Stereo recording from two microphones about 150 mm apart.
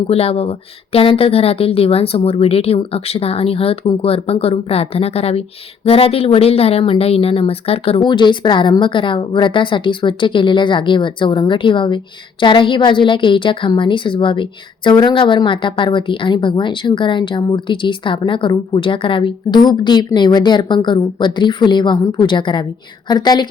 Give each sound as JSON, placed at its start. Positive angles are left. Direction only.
{"t": 0.1, "sound": "a woman's voice", "side_deg": 40}